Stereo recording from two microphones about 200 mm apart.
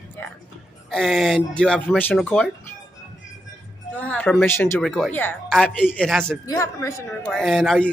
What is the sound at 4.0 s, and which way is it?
Speech, 5° left (ahead or behind).